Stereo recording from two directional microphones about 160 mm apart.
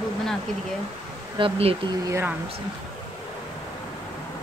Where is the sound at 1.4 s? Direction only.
35° right (ahead or behind).